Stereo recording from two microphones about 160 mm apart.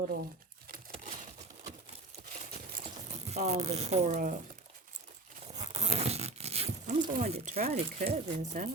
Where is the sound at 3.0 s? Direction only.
45° right (ahead or behind).